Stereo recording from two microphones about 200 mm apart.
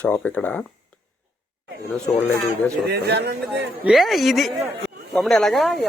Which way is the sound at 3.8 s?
Centre (ahead or behind).